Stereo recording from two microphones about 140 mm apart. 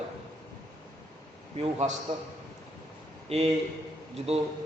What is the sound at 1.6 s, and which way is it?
Speech, 50° right (ahead or behind).